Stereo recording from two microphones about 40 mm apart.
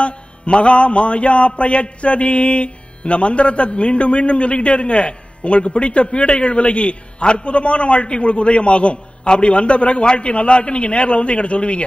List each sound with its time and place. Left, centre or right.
0.0 s mantra: left